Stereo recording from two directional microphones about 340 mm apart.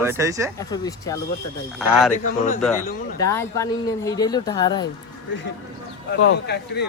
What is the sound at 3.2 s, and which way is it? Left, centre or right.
Speech, centre.